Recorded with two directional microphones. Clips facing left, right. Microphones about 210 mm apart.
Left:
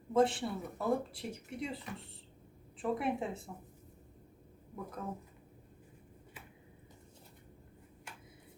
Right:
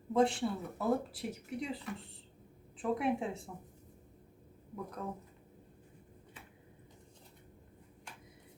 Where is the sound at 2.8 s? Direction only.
Centre (ahead or behind).